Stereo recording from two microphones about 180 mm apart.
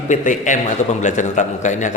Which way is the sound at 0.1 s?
45° left (ahead or behind).